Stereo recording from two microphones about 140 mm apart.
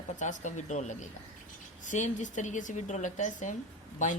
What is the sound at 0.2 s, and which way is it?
A woman's voice, 60° left (ahead or behind).